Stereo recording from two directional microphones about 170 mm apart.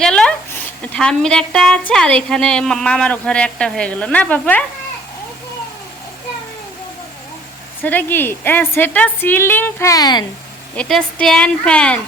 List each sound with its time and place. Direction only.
0.0 s a sound: 5° left (ahead or behind)
1.9 s a woman's voice: 5° left (ahead or behind)
7.8 s a woman's voice: 10° left (ahead or behind)
10.8 s a woman's voice: 5° left (ahead or behind)